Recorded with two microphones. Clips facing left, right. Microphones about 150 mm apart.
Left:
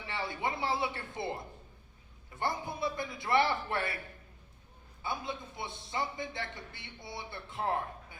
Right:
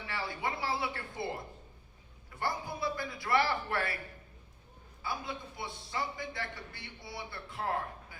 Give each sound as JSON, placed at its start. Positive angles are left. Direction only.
{"t": 0.1, "sound": "a man's voice", "side_deg": 20}
{"t": 5.0, "sound": "a man's voice", "side_deg": 20}